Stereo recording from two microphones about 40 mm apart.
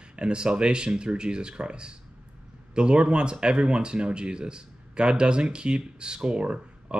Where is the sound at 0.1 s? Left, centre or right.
Right.